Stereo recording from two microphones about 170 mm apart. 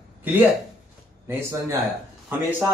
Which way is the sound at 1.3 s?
15° right (ahead or behind).